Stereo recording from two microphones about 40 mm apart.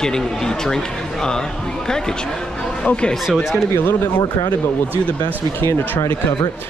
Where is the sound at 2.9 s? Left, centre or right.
Left.